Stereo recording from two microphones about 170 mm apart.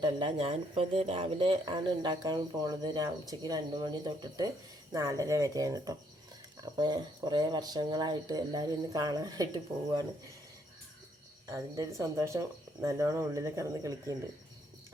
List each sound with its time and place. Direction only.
0.0 s speech: 30° right (ahead or behind)
11.4 s speech: 20° right (ahead or behind)